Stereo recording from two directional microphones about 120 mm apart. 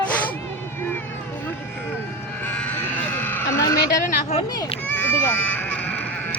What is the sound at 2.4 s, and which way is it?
Sheep, 10° left (ahead or behind).